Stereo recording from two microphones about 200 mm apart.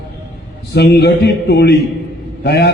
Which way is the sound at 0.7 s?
55° left (ahead or behind).